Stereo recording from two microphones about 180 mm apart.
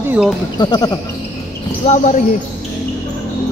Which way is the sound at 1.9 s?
45° left (ahead or behind).